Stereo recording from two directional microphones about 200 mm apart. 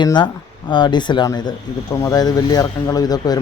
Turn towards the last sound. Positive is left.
turn(degrees=20)  # may be behind; listen again after turning